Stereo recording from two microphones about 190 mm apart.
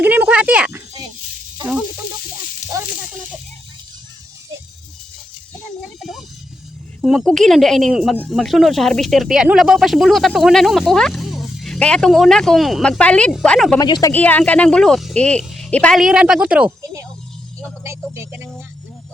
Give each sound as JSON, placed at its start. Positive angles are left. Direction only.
{"t": 0.0, "sound": "a sound", "side_deg": -10}
{"t": 6.0, "sound": "music", "side_deg": 0}
{"t": 7.0, "sound": "speech", "side_deg": 0}
{"t": 13.7, "sound": "speech", "side_deg": 20}
{"t": 14.1, "sound": "speech", "side_deg": 10}
{"t": 18.1, "sound": "speech", "side_deg": -15}